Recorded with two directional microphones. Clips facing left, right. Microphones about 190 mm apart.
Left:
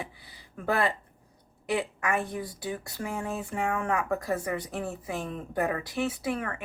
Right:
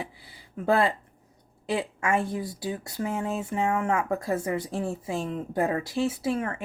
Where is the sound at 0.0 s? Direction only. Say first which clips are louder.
Right 2 dB; 25° right (ahead or behind).